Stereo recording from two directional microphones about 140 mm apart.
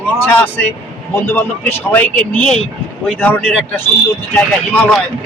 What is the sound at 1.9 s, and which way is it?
A man's voice, 10° left (ahead or behind).